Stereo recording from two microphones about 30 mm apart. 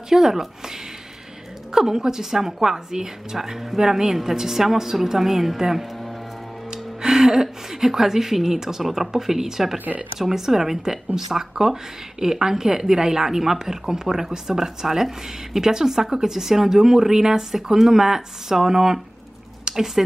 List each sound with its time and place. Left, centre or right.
0.1 s a woman's voice: centre
6.7 s music: centre
7.7 s speech: centre
19.7 s a sound: right